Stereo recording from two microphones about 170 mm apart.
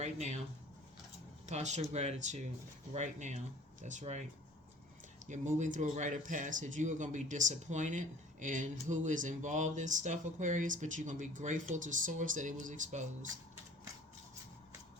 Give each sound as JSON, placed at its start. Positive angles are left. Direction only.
{"t": 0.0, "sound": "speech", "side_deg": -45}
{"t": 1.5, "sound": "speech", "side_deg": -40}
{"t": 5.2, "sound": "speech", "side_deg": -45}